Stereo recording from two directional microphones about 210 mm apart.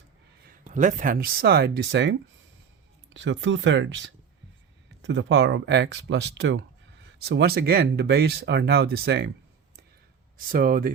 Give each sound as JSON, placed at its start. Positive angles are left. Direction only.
{"t": 0.4, "sound": "speech", "side_deg": -35}
{"t": 10.3, "sound": "speech", "side_deg": -45}